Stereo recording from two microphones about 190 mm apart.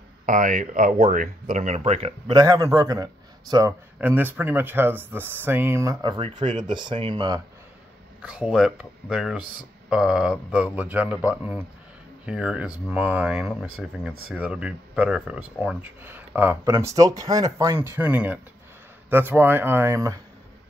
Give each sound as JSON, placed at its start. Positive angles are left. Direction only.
{"t": 0.3, "sound": "speech", "side_deg": -45}
{"t": 2.3, "sound": "a man's voice", "side_deg": -20}
{"t": 8.2, "sound": "a man's voice", "side_deg": -5}